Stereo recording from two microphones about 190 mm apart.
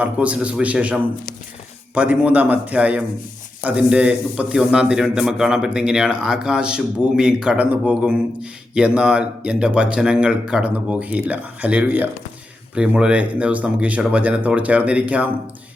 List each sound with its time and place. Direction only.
0.0 s a man's voice: 5° right (ahead or behind)